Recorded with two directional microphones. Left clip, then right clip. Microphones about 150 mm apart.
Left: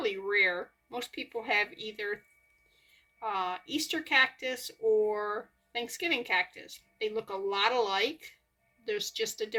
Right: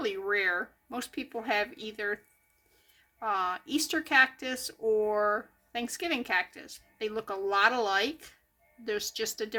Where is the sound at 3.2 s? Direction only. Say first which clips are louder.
Right 3 dB; 50° right (ahead or behind).